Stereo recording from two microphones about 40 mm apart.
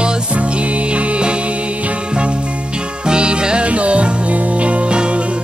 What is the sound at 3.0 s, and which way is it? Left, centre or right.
Music, right.